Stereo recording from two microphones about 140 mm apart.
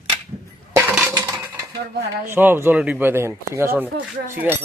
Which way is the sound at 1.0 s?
25° right (ahead or behind).